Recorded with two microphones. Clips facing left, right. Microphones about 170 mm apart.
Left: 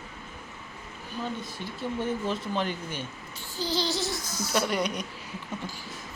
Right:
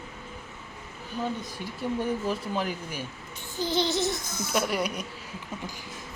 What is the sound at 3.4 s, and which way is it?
Music, 20° right (ahead or behind).